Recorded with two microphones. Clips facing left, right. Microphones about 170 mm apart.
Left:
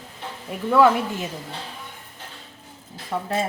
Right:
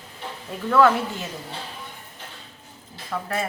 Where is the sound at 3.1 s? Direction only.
25° left (ahead or behind).